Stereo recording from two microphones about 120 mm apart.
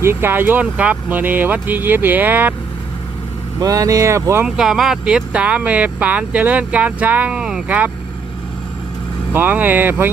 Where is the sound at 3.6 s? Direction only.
30° right (ahead or behind).